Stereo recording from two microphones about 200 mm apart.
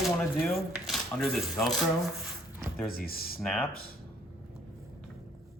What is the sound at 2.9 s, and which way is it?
Speech, 50° left (ahead or behind).